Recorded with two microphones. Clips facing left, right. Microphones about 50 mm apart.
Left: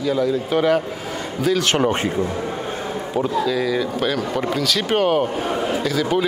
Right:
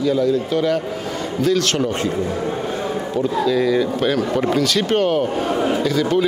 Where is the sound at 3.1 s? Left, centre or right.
Centre.